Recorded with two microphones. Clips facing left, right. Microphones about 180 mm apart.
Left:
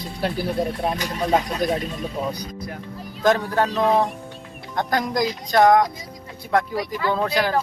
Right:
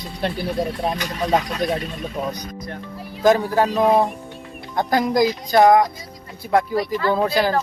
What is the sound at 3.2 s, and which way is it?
Speech, 5° right (ahead or behind).